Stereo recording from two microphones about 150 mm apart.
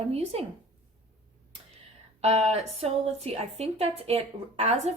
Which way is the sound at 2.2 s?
45° right (ahead or behind).